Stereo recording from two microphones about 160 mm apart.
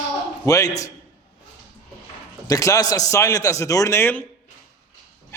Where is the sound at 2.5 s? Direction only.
20° left (ahead or behind).